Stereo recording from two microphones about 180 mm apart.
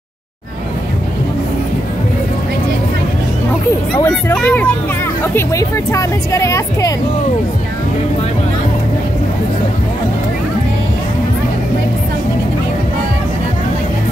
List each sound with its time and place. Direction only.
3.9 s speech: 5° left (ahead or behind)